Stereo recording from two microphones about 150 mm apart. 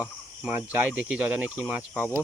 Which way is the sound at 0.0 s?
10° right (ahead or behind).